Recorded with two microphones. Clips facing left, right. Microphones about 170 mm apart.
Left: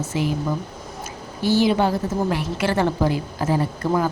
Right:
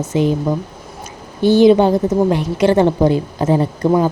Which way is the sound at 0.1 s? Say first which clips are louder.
Right 8 dB; 20° right (ahead or behind).